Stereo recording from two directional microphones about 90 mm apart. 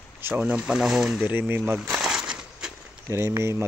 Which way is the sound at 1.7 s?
Centre (ahead or behind).